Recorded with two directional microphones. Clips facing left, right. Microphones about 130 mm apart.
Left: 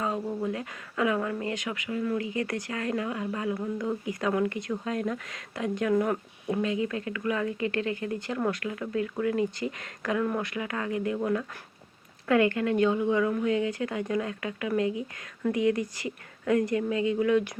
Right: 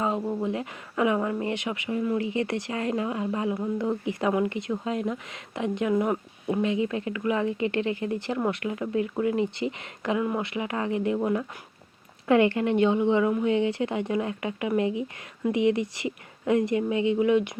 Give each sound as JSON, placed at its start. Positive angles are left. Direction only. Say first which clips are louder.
{"t": 0.0, "sound": "speech", "louder": "right 3 dB", "side_deg": -20}